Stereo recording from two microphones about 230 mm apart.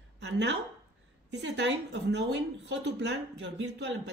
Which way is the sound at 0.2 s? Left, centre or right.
Right.